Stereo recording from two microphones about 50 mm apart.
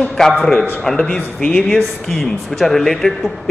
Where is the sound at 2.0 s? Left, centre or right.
Centre.